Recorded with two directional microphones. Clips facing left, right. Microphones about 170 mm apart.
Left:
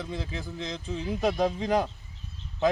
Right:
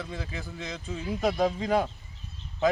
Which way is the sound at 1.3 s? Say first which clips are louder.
Even; 10° left (ahead or behind).